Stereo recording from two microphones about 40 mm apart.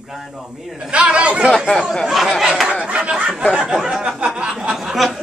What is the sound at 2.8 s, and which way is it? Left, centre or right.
Speech, right.